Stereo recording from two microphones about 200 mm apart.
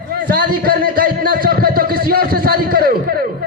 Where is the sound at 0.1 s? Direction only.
50° right (ahead or behind).